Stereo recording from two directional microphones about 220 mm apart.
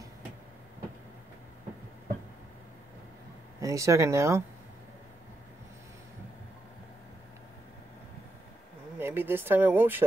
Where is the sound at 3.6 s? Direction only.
15° right (ahead or behind).